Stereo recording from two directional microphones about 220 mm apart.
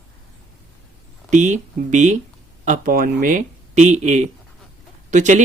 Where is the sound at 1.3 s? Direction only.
35° right (ahead or behind).